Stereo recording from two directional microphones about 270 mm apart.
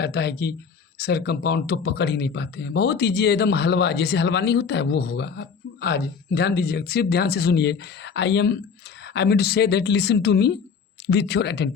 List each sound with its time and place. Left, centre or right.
0.0 s speech: left